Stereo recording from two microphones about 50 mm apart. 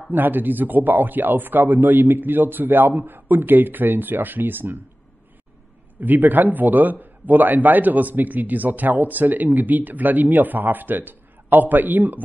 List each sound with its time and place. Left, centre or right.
0.1 s a man's voice: right
5.9 s a man's voice: right